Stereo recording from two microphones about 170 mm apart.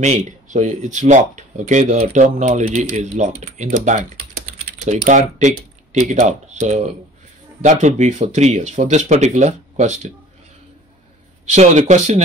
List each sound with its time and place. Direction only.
0.0 s speech: 40° right (ahead or behind)
11.5 s speech: 45° right (ahead or behind)